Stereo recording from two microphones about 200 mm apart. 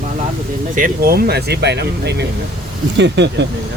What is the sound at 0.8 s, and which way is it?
Speech, 45° right (ahead or behind).